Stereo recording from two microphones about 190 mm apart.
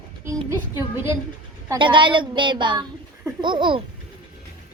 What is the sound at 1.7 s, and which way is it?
A woman's voice, 25° right (ahead or behind).